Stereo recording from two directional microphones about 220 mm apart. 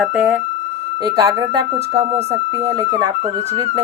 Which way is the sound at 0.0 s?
5° right (ahead or behind).